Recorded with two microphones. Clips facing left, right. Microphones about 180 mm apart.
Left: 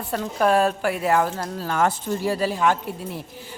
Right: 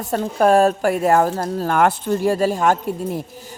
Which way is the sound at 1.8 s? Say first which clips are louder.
Right 4 dB; 60° right (ahead or behind).